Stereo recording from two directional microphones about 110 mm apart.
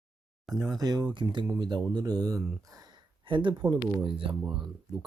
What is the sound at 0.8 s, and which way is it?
Speech, 35° right (ahead or behind).